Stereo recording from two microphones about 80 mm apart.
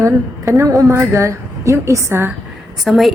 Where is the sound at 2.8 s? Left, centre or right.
Centre.